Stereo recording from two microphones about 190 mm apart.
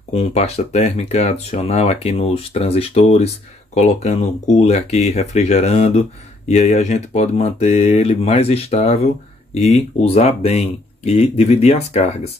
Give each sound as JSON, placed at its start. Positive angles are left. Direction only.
{"t": 0.1, "sound": "speech", "side_deg": 35}